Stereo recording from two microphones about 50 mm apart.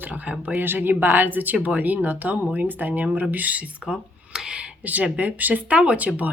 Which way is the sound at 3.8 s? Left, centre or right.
Centre.